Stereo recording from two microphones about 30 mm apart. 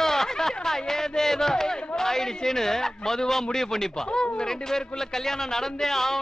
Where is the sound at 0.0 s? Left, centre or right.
Centre.